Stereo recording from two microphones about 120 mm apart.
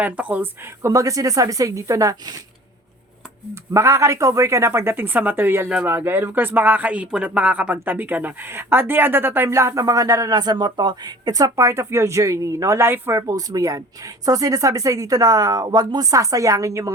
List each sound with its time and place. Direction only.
0.0 s speech: 15° right (ahead or behind); by 2.4 s 30° right (ahead or behind)
3.5 s speech: 25° right (ahead or behind)